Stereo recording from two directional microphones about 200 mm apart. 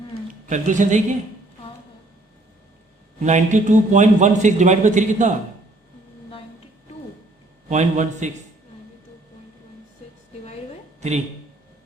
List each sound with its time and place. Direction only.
0.4 s a man's voice: 40° right (ahead or behind)
3.2 s a man's voice: 35° right (ahead or behind)
7.7 s a man's voice: 35° right (ahead or behind)